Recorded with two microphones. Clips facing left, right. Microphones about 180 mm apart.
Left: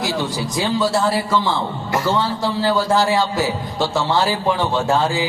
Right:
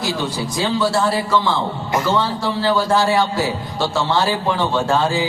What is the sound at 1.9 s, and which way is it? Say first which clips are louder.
Speech: even; 20° right (ahead or behind).